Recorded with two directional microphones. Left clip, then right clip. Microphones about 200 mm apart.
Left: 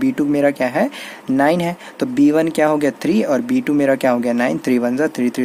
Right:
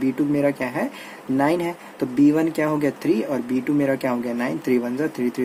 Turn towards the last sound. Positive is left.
turn(degrees=50)  # may be behind; listen again after turning